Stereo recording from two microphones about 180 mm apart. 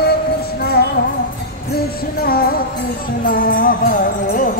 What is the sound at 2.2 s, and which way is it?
Music, 55° left (ahead or behind).